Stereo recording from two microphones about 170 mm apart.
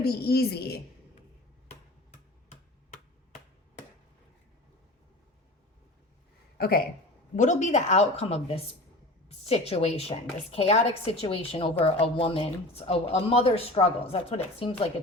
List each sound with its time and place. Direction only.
0.0 s a woman's voice: 65° left (ahead or behind)
6.6 s speech: 60° left (ahead or behind)
7.3 s a woman's voice: 45° left (ahead or behind)